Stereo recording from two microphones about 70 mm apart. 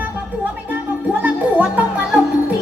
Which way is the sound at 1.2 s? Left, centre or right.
Right.